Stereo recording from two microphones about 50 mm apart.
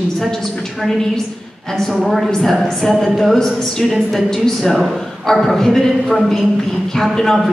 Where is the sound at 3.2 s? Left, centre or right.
Centre.